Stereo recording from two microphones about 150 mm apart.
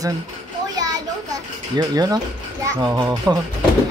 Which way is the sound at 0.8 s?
25° right (ahead or behind).